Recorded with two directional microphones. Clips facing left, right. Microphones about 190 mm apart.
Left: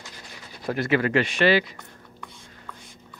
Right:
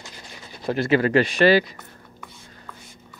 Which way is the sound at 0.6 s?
25° right (ahead or behind).